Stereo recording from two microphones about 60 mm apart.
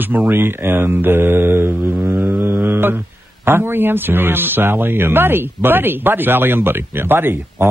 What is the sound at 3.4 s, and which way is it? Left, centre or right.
Speech, right.